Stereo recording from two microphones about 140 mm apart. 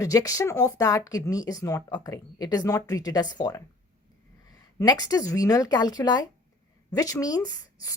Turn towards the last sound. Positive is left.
turn(degrees=25)  # may be behind; listen again after turning